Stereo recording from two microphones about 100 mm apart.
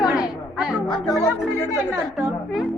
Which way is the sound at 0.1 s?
5° right (ahead or behind).